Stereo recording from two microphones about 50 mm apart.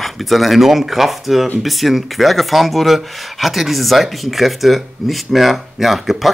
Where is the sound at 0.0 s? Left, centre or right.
Centre.